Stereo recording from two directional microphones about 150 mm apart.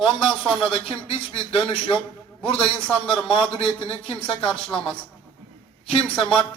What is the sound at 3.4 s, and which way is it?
Speech, 40° left (ahead or behind).